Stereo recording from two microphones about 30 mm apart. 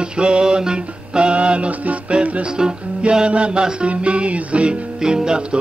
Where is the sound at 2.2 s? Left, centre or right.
Right.